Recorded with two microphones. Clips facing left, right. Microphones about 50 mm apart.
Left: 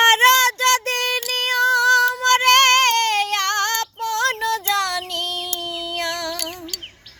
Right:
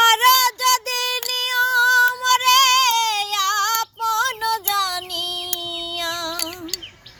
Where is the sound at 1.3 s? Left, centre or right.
Left.